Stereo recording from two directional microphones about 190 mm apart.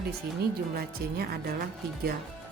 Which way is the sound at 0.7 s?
55° right (ahead or behind).